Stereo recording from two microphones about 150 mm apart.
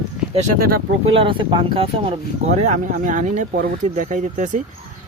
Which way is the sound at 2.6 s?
55° right (ahead or behind).